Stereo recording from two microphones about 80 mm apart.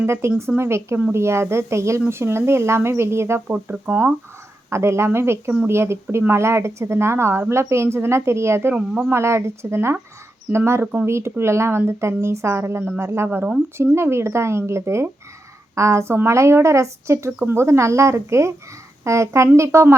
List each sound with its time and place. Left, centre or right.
0.0 s speech: right
8.7 s speech: centre
9.0 s speech: right